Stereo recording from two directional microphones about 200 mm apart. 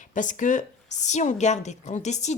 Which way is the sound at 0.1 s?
40° left (ahead or behind).